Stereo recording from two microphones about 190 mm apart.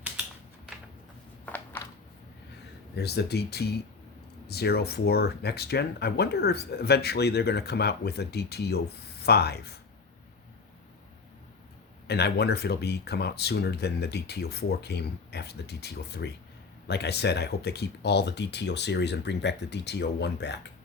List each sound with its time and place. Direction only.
1.5 s a sound: 10° left (ahead or behind)
2.9 s speech: 60° left (ahead or behind)
12.0 s speech: 60° left (ahead or behind)